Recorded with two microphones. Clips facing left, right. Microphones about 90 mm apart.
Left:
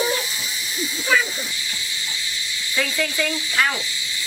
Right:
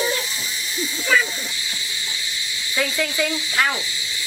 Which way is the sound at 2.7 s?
10° right (ahead or behind).